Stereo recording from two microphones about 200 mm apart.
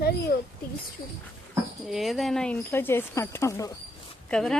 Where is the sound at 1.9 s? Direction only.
Centre (ahead or behind).